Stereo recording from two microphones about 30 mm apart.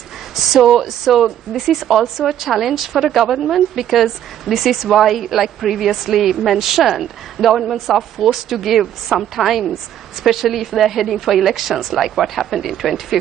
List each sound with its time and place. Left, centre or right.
0.4 s a woman's voice: centre